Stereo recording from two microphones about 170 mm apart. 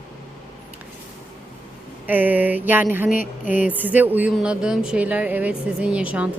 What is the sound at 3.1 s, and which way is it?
Speech, 50° left (ahead or behind).